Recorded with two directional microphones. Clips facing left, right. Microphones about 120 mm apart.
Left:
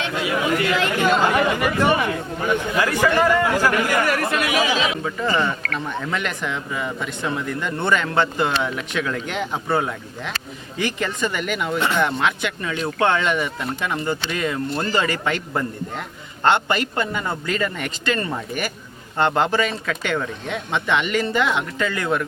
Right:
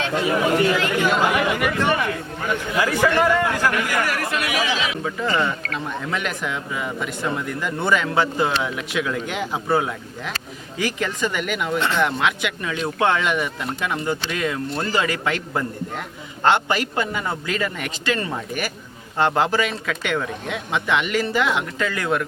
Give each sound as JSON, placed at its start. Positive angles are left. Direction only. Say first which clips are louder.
{"t": 0.1, "sound": "speech", "louder": "right 3 dB", "side_deg": -35}
{"t": 0.8, "sound": "speech", "louder": "left 1 dB", "side_deg": 25}
{"t": 1.2, "sound": "speech", "louder": "left 1 dB", "side_deg": -10}
{"t": 2.8, "sound": "a man's voice", "louder": "right 2 dB", "side_deg": -10}
{"t": 3.1, "sound": "a man's voice", "louder": "left 1 dB", "side_deg": 10}
{"t": 4.4, "sound": "speech", "louder": "left 3 dB", "side_deg": 25}
{"t": 5.0, "sound": "speech", "louder": "left 1 dB", "side_deg": 5}
{"t": 11.8, "sound": "a man's voice", "louder": "left 1 dB", "side_deg": 10}
{"t": 12.0, "sound": "speech", "louder": "even", "side_deg": 0}